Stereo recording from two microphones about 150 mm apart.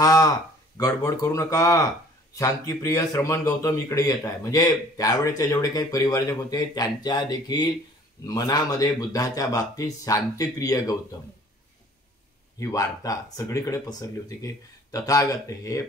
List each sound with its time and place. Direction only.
0.0 s speech: 25° left (ahead or behind)
12.5 s speech: 20° left (ahead or behind)